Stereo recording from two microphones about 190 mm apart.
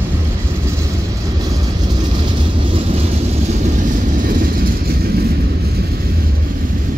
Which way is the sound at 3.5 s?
40° right (ahead or behind).